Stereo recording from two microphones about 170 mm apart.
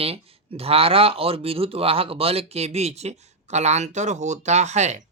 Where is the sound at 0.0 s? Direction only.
35° right (ahead or behind).